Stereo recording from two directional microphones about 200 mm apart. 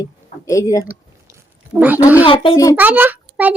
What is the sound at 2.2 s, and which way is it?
Speech, 25° left (ahead or behind).